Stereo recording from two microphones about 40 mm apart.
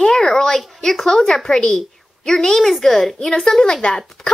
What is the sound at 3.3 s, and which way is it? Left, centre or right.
Speech, left.